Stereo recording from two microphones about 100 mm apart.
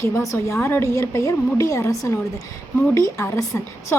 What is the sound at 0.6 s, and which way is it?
A woman's voice, 25° left (ahead or behind).